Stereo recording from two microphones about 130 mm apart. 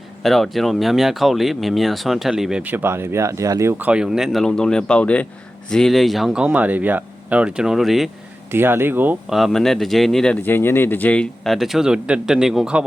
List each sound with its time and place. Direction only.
0.2 s speech: centre (ahead or behind); by 3.8 s 25° right (ahead or behind)
3.8 s speech: 5° right (ahead or behind)
8.5 s speech: 15° right (ahead or behind)
9.3 s speech: centre (ahead or behind)
10.4 s speech: 15° left (ahead or behind); by 12.8 s 5° right (ahead or behind)